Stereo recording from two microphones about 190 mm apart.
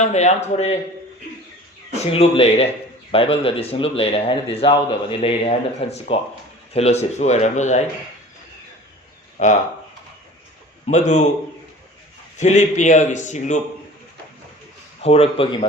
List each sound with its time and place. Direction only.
0.0 s speech: 35° left (ahead or behind)
1.9 s speech: 35° left (ahead or behind)
9.4 s speech: 35° left (ahead or behind)
10.8 s speech: 40° left (ahead or behind)
12.4 s speech: 40° left (ahead or behind)
15.0 s speech: 30° left (ahead or behind)